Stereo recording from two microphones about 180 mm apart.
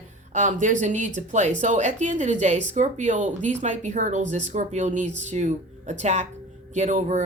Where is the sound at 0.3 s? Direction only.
45° right (ahead or behind).